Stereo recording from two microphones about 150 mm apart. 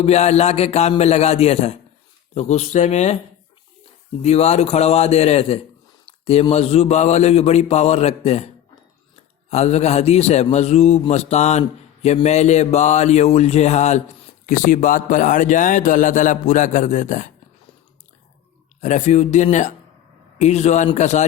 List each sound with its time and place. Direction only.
0.0 s a man's voice: 45° left (ahead or behind)
4.2 s a man's voice: 45° left (ahead or behind)
9.5 s a man's voice: 45° left (ahead or behind)
18.8 s a man's voice: 50° left (ahead or behind)